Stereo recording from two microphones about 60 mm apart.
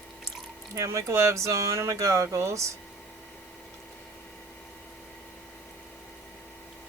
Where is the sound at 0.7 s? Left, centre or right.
Right.